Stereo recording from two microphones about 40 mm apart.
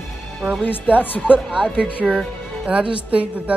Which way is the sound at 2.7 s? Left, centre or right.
Right.